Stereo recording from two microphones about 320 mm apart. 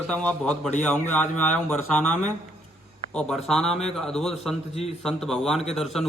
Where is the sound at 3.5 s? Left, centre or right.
Centre.